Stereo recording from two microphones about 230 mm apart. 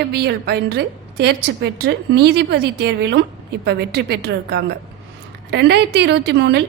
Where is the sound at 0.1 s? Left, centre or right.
Right.